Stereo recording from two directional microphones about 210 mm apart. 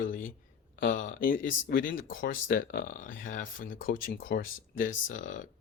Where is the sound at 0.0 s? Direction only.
40° left (ahead or behind).